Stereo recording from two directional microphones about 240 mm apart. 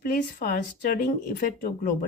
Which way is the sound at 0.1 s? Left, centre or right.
Left.